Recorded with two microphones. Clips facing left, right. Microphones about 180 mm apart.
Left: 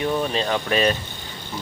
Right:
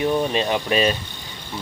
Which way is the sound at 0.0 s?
20° right (ahead or behind).